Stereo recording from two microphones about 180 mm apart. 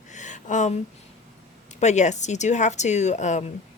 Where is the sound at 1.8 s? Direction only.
40° left (ahead or behind).